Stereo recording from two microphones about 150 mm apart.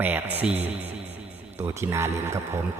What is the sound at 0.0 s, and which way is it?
Speech, 10° right (ahead or behind).